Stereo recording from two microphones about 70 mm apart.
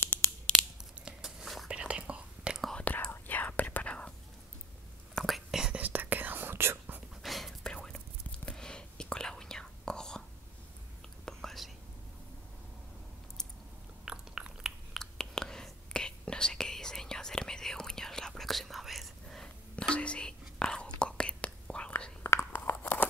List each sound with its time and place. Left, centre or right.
0.5 s scissors: centre
1.2 s whispering: centre
1.7 s whispering: centre
2.7 s whispering: centre
5.1 s whispering: centre
5.8 s whispering: right
7.2 s whispering: centre
11.2 s whispering: centre
14.0 s biting: centre
15.0 s whispering: centre
19.7 s whispering: centre
22.2 s crunch: left